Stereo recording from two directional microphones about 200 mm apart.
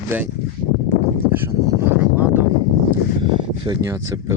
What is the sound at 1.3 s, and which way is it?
Speech, 10° right (ahead or behind).